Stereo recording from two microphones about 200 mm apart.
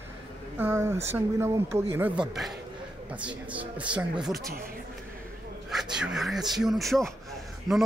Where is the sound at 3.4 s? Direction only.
5° right (ahead or behind).